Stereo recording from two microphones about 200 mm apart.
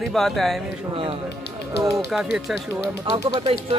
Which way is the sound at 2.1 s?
Centre (ahead or behind).